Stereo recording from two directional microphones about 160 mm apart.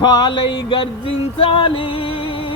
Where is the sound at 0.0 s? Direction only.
30° left (ahead or behind).